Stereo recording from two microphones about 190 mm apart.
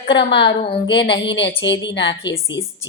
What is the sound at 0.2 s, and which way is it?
A woman's voice, 65° left (ahead or behind).